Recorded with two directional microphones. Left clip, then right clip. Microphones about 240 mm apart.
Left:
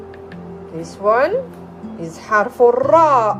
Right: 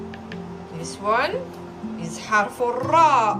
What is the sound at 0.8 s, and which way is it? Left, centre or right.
Speech, centre.